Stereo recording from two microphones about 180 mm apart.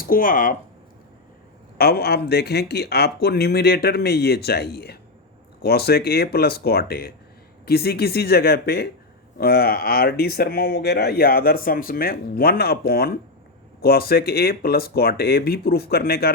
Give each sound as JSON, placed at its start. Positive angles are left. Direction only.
{"t": 0.0, "sound": "speech", "side_deg": 50}
{"t": 1.8, "sound": "speech", "side_deg": 60}